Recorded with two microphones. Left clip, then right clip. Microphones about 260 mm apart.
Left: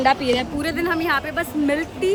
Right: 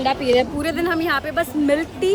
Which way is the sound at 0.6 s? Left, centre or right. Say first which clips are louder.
Right 1 dB; centre.